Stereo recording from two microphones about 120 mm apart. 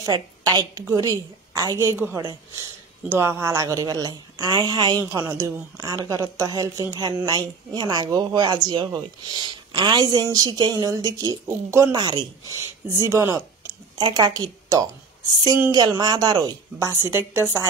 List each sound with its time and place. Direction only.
0.0 s a woman's voice: 30° right (ahead or behind)
3.1 s speech: 20° right (ahead or behind)
12.0 s speech: 40° right (ahead or behind)
12.9 s a woman's voice: 25° right (ahead or behind)
13.9 s a woman's voice: 35° right (ahead or behind)
17.0 s a woman's voice: 20° right (ahead or behind)